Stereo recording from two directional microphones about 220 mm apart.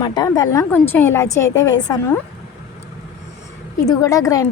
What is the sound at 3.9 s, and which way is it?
Speech, 15° left (ahead or behind).